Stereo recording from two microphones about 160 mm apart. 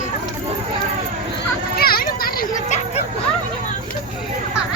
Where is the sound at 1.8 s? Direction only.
70° left (ahead or behind).